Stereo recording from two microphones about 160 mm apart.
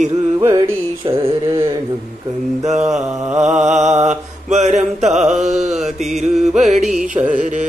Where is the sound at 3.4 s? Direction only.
45° right (ahead or behind).